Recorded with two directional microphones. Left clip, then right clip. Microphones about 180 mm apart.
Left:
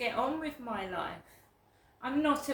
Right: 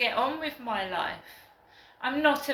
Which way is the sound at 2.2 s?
25° left (ahead or behind).